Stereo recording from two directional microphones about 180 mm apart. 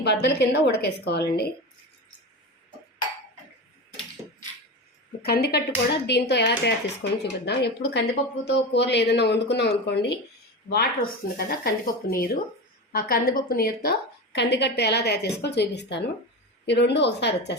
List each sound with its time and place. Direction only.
0.0 s speech: 70° left (ahead or behind)
5.2 s speech: 60° left (ahead or behind)
14.3 s speech: 70° left (ahead or behind)